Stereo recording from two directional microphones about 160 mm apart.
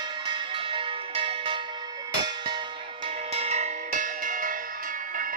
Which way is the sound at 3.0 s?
40° right (ahead or behind).